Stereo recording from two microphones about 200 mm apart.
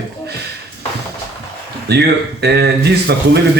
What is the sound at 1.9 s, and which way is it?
Speech, 55° right (ahead or behind).